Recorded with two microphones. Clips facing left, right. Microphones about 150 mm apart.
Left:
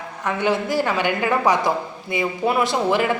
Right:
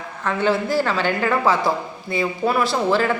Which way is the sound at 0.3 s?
15° left (ahead or behind).